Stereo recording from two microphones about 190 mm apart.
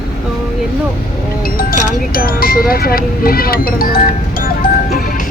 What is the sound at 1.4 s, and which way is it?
Speech, 50° left (ahead or behind).